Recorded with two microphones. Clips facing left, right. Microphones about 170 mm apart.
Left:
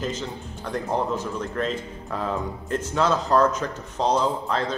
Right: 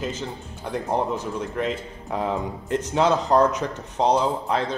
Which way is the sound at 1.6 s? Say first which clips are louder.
Right 1 dB; 15° right (ahead or behind).